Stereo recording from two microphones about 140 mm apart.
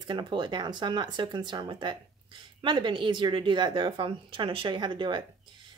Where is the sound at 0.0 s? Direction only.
35° right (ahead or behind).